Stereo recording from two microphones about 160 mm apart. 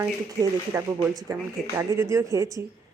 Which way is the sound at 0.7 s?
15° right (ahead or behind).